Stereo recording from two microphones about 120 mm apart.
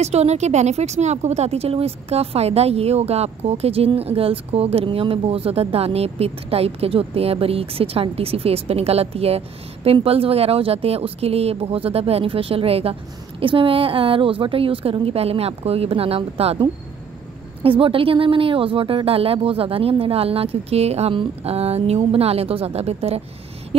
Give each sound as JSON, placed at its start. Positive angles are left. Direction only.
{"t": 0.0, "sound": "speech", "side_deg": -65}
{"t": 17.6, "sound": "speech", "side_deg": -50}
{"t": 23.7, "sound": "a sound", "side_deg": -55}